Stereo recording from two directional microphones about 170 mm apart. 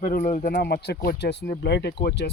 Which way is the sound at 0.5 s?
70° left (ahead or behind).